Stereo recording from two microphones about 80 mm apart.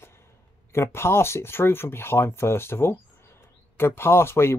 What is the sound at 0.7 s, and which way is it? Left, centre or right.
Speech, left.